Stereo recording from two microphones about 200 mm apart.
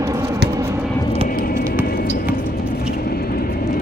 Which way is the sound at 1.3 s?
45° left (ahead or behind).